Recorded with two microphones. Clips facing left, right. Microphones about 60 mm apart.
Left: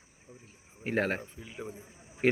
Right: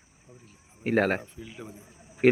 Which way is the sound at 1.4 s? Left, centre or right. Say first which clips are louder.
Even; centre.